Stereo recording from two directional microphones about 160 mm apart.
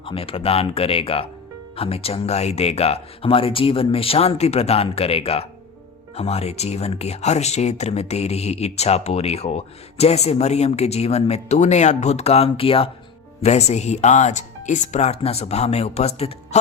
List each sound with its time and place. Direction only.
0.0 s speech: 35° left (ahead or behind)